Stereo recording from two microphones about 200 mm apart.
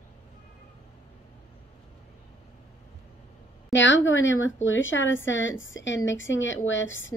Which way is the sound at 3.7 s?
65° left (ahead or behind).